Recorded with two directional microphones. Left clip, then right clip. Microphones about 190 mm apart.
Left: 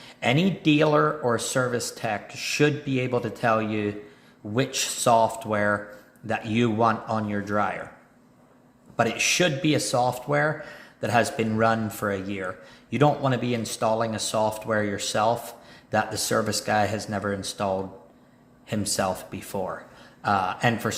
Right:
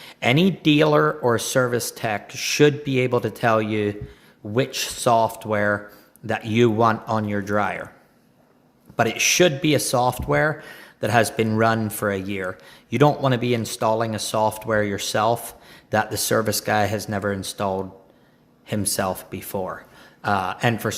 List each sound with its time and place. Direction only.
0.0 s speech: 40° right (ahead or behind)
4.5 s a man's voice: 35° right (ahead or behind)
9.0 s a man's voice: 40° right (ahead or behind)